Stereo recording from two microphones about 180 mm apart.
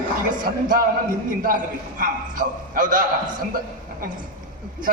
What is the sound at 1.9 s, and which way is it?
A man's voice, 50° right (ahead or behind).